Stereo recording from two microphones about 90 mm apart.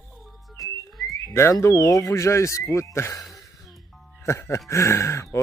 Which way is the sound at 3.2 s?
Centre (ahead or behind).